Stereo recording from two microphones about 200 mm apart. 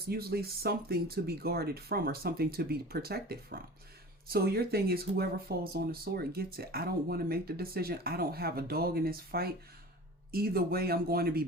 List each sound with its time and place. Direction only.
0.1 s speech: 50° right (ahead or behind)